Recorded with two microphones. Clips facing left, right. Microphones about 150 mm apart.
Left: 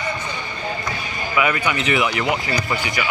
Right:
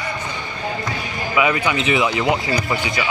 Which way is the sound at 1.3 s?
20° right (ahead or behind).